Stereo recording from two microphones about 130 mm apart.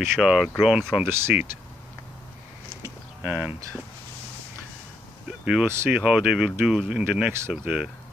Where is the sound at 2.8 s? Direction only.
15° right (ahead or behind).